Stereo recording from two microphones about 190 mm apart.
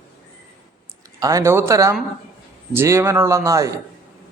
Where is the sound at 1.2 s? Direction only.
15° right (ahead or behind).